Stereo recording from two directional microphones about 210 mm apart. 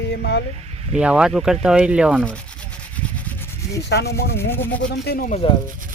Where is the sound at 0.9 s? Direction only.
5° right (ahead or behind).